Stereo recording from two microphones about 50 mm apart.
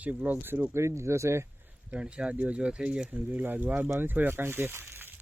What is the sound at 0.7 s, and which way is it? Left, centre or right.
Speech, right.